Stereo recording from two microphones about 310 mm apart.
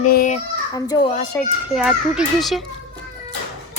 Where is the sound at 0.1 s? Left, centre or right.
Left.